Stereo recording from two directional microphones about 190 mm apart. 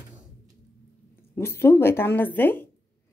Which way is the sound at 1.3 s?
15° left (ahead or behind).